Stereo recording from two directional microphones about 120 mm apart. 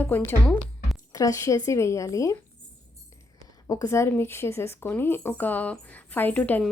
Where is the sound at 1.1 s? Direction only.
25° left (ahead or behind).